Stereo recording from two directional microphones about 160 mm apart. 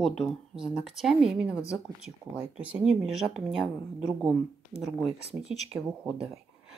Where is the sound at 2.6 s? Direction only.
10° right (ahead or behind).